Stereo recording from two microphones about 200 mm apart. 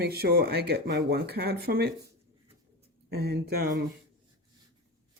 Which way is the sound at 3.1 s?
50° right (ahead or behind).